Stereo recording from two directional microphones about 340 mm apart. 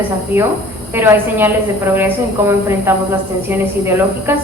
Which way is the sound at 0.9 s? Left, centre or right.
Centre.